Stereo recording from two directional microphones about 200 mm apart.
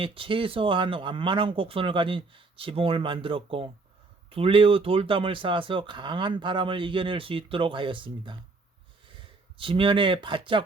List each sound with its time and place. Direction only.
0.0 s speech: 25° right (ahead or behind)
9.6 s speech: 25° right (ahead or behind)